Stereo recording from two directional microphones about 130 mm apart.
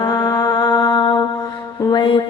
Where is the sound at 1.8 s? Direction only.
40° left (ahead or behind).